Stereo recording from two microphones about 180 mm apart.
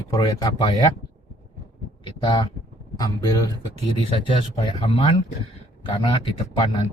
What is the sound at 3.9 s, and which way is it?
Speech, 30° left (ahead or behind).